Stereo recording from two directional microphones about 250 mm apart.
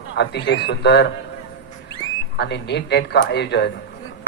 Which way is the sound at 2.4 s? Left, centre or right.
Left.